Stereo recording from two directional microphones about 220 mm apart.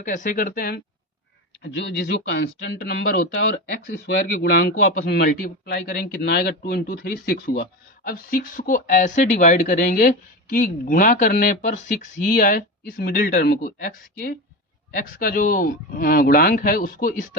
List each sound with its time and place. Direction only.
0.0 s a man's voice: 35° left (ahead or behind)
1.7 s a man's voice: 50° left (ahead or behind)